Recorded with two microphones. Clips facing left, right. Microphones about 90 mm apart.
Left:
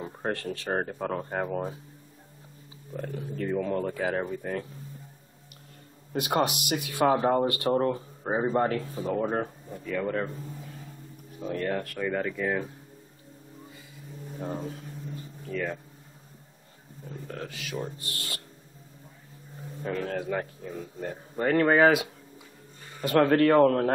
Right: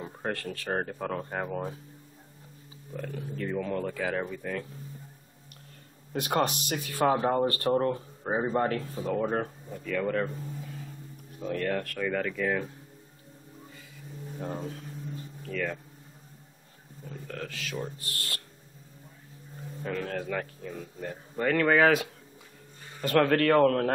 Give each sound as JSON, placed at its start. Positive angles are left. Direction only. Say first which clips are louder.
{"t": 0.2, "sound": "speech", "louder": "left 2 dB", "side_deg": 25}
{"t": 2.9, "sound": "speech", "louder": "left 2 dB", "side_deg": 30}
{"t": 4.2, "sound": "speech", "louder": "left 2 dB", "side_deg": 35}
{"t": 6.1, "sound": "speech", "louder": "left 1 dB", "side_deg": 5}
{"t": 14.4, "sound": "a sound", "louder": "left 2 dB", "side_deg": 5}
{"t": 17.1, "sound": "speech", "louder": "left 1 dB", "side_deg": 10}
{"t": 20.0, "sound": "speech", "louder": "left 3 dB", "side_deg": 15}
{"t": 22.9, "sound": "speech", "louder": "left 2 dB", "side_deg": 5}